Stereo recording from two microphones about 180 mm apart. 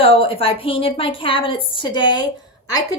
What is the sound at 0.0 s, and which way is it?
A woman's voice, 30° left (ahead or behind).